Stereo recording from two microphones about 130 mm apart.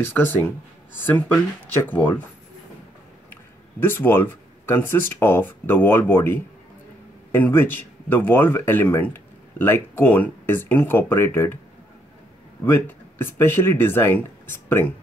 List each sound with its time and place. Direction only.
0.0 s speech: 15° left (ahead or behind)
3.9 s speech: 15° left (ahead or behind)
12.6 s speech: 20° left (ahead or behind)